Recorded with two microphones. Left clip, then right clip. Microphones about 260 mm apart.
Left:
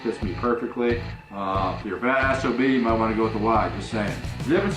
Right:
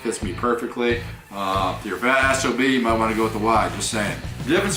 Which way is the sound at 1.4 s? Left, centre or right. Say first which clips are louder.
Right 3 dB; left.